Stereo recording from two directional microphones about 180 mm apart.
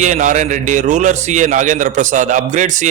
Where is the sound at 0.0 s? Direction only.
45° right (ahead or behind).